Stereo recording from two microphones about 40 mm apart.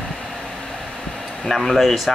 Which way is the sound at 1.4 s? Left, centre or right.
Centre.